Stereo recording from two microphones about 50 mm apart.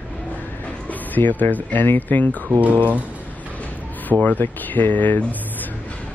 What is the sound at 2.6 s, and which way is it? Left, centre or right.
Speech, right.